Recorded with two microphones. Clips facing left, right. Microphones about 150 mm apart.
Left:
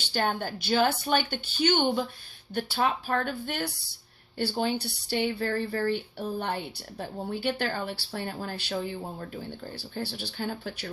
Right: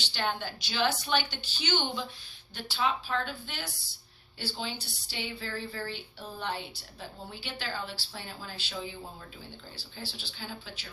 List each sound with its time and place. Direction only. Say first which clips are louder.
0.1 s a woman's voice: left 5 dB; 45° left (ahead or behind)